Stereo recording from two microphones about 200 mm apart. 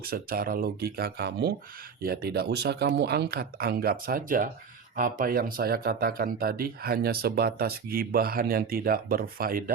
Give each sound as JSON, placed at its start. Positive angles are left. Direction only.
{"t": 0.0, "sound": "speech", "side_deg": -50}